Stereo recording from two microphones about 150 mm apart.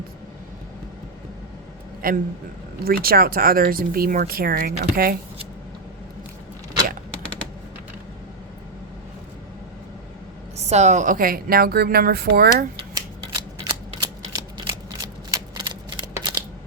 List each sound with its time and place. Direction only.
2.0 s a woman's voice: 80° right
10.6 s a woman's voice: 50° right (ahead or behind); by 12.6 s 90° right
12.9 s shuffling cards: 25° right (ahead or behind)